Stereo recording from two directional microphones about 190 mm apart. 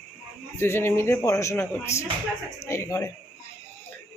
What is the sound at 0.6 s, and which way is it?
A man's voice, 10° left (ahead or behind).